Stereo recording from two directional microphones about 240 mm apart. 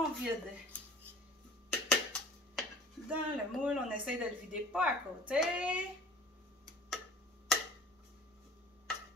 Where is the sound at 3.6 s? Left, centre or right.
Centre.